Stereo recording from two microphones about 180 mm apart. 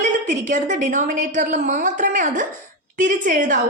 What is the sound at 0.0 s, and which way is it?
A woman's voice, 45° right (ahead or behind).